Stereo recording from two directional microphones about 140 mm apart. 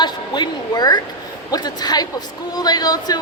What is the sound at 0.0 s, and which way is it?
A woman's voice, 30° left (ahead or behind).